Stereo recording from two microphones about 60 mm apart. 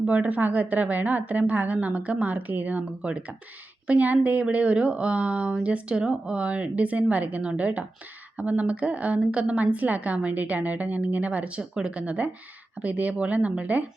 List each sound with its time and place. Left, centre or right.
0.0 s a woman's voice: right